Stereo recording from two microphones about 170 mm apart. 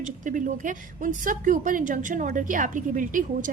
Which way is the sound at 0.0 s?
50° right (ahead or behind).